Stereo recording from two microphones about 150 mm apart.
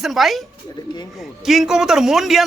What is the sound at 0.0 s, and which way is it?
Speech, centre (ahead or behind).